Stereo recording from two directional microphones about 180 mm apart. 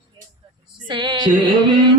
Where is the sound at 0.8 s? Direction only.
25° right (ahead or behind).